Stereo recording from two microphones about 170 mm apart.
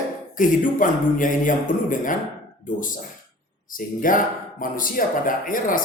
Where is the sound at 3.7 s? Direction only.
55° left (ahead or behind).